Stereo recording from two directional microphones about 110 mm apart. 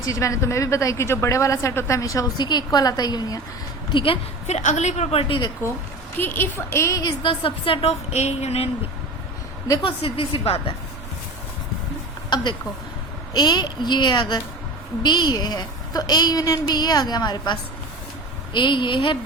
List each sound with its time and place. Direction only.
0.0 s a woman's voice: 30° left (ahead or behind)
3.9 s a woman's voice: 55° left (ahead or behind)
4.4 s a woman's voice: 90° left
6.1 s a woman's voice: 20° left (ahead or behind)
7.0 s a woman's voice: 50° left (ahead or behind); by 8.7 s 70° left (ahead or behind)
9.8 s a woman's voice: 55° left (ahead or behind)
12.3 s a woman's voice: 45° left (ahead or behind)